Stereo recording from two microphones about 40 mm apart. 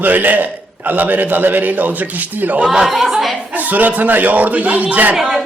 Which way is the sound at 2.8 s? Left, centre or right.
Centre.